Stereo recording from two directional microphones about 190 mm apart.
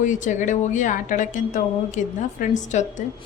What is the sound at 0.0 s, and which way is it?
A woman's voice, 40° left (ahead or behind).